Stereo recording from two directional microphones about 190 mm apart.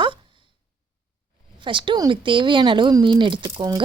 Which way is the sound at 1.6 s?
25° right (ahead or behind).